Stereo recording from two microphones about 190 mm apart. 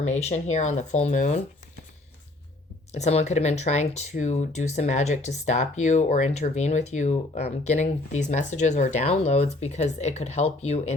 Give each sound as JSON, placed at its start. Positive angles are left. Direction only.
{"t": 0.1, "sound": "speech", "side_deg": 35}
{"t": 2.9, "sound": "speech", "side_deg": 35}